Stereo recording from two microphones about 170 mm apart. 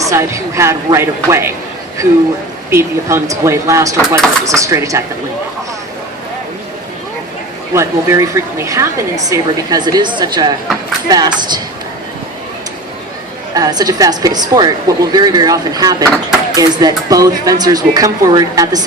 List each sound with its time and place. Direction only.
0.0 s a woman's voice: 15° right (ahead or behind)
2.6 s a woman's voice: 15° right (ahead or behind)
7.7 s a woman's voice: 15° right (ahead or behind)
13.5 s a woman's voice: 20° right (ahead or behind)